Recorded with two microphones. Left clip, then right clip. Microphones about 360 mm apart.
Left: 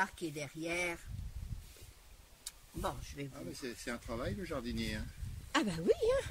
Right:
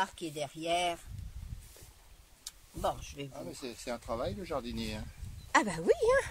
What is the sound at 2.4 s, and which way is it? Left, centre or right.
Speech, centre.